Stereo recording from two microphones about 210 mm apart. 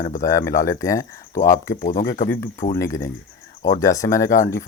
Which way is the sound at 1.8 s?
40° left (ahead or behind).